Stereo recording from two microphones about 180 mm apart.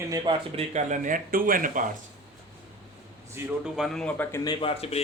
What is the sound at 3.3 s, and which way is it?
A man's voice, 5° right (ahead or behind).